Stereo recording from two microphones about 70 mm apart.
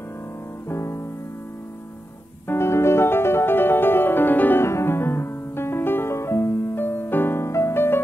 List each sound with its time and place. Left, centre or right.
0.7 s music: left
2.4 s music: left